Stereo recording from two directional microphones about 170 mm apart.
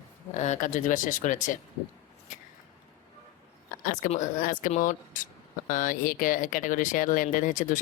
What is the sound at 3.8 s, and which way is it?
Speech, 50° left (ahead or behind).